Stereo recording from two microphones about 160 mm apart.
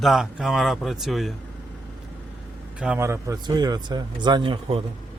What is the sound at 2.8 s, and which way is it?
Speech, 10° right (ahead or behind).